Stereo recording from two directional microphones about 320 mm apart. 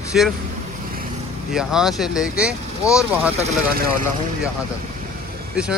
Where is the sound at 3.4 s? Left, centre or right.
Right.